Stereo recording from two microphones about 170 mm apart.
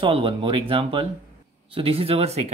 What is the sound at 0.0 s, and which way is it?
Speech, 30° right (ahead or behind).